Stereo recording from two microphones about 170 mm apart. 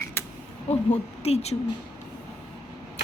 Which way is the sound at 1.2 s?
40° left (ahead or behind).